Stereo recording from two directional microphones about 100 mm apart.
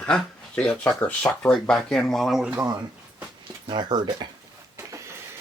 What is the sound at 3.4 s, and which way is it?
Speech, 50° right (ahead or behind).